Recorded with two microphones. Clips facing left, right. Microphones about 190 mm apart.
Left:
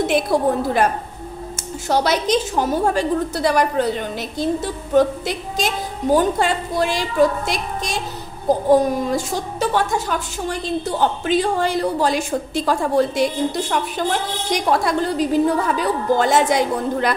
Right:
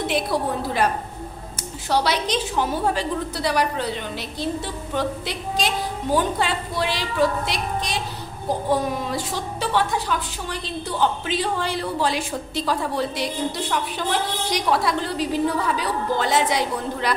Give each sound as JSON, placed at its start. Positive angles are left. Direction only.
{"t": 0.0, "sound": "a woman's voice", "side_deg": 50}
{"t": 1.9, "sound": "a woman's voice", "side_deg": 45}